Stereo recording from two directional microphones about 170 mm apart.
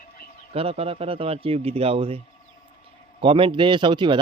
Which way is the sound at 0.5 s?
35° right (ahead or behind).